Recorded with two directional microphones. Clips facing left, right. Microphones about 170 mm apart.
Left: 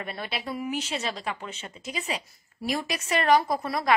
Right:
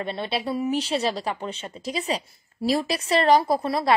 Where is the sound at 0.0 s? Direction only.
25° right (ahead or behind).